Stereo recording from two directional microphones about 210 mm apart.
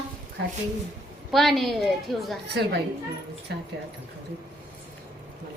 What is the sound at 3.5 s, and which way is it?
Speech, 50° right (ahead or behind).